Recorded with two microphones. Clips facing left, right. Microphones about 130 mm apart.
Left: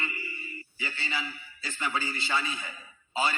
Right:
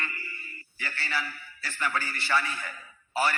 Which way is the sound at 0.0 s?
15° left (ahead or behind).